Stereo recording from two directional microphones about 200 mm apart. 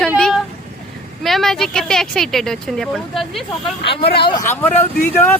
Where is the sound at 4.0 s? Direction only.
55° left (ahead or behind).